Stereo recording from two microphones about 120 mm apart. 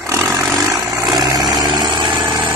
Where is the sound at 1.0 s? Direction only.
30° right (ahead or behind).